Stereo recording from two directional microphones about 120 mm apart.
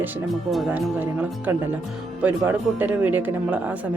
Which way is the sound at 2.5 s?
15° right (ahead or behind).